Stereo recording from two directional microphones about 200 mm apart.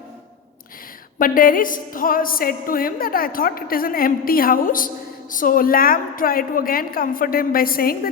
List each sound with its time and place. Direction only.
1.2 s music: 45° left (ahead or behind)